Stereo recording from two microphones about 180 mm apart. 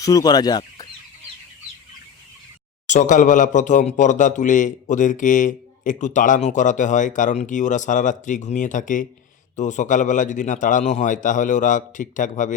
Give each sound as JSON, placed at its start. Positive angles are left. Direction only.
{"t": 0.0, "sound": "speech", "side_deg": 20}
{"t": 2.8, "sound": "speech", "side_deg": 45}